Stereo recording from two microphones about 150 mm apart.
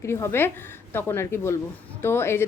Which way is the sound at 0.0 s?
15° left (ahead or behind).